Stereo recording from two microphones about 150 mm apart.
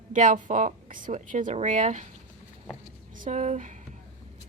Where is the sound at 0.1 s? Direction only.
55° right (ahead or behind).